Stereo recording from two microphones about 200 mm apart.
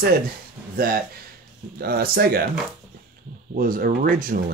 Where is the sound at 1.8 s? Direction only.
50° right (ahead or behind).